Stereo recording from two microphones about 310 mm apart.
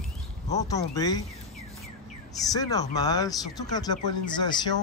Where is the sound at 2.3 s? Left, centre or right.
Centre.